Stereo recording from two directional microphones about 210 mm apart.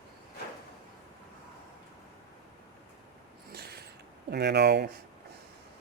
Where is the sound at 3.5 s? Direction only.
50° right (ahead or behind).